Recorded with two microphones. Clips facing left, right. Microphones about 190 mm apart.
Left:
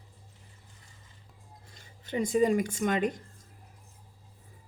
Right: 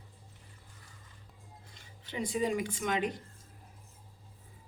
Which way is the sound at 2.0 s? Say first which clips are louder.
Left 7 dB; 45° left (ahead or behind).